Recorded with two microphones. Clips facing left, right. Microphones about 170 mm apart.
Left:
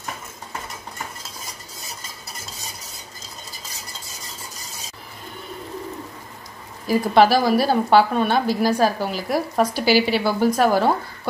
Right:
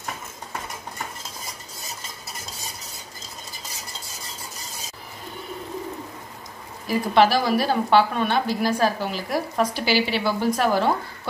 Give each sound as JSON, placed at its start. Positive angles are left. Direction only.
{"t": 6.9, "sound": "a woman's voice", "side_deg": 40}